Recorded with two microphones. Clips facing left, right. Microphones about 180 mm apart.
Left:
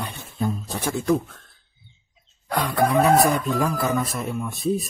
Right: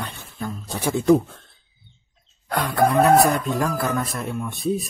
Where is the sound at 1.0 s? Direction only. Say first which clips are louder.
Right 6 dB; 30° right (ahead or behind).